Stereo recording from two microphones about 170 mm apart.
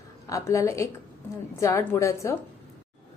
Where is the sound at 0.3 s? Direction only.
20° left (ahead or behind).